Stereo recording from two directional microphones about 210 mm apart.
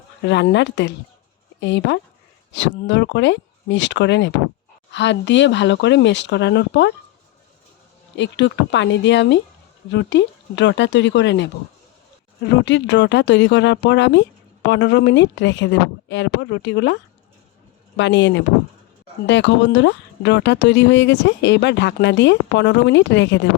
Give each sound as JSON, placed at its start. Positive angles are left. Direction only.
{"t": 0.2, "sound": "speech", "side_deg": 55}
{"t": 8.1, "sound": "speech", "side_deg": 60}
{"t": 12.5, "sound": "speech", "side_deg": 55}